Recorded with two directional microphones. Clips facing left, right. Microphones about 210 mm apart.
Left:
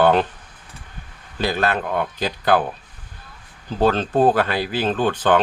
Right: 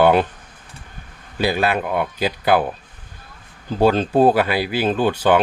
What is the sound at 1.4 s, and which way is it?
Speech, 10° right (ahead or behind).